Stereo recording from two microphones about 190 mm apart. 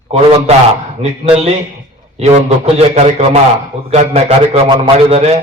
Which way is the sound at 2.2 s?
35° right (ahead or behind).